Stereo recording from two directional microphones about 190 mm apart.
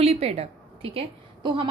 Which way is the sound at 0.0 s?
30° right (ahead or behind).